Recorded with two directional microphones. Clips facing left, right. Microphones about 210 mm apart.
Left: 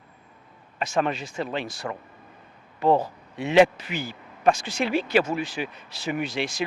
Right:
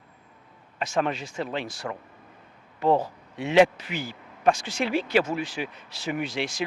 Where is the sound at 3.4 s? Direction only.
10° left (ahead or behind).